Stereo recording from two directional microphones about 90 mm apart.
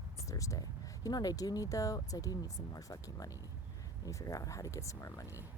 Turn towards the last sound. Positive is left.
turn(degrees=40)  # may be behind; listen again after turning